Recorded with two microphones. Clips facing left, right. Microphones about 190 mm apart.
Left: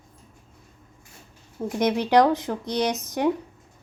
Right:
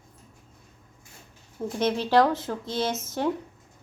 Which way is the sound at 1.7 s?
15° left (ahead or behind).